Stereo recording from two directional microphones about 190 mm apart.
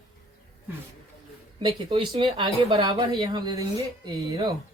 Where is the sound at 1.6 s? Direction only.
25° right (ahead or behind).